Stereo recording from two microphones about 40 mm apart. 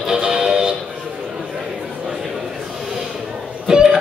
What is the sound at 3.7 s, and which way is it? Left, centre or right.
Music, centre.